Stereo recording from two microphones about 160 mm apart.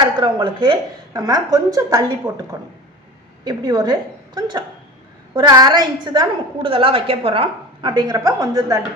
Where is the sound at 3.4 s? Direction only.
25° right (ahead or behind).